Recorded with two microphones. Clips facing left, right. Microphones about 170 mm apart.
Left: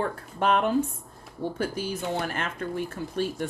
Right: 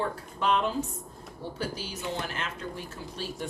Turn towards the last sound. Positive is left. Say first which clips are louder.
# left 8 dB
turn(degrees=55)  # may be behind; listen again after turning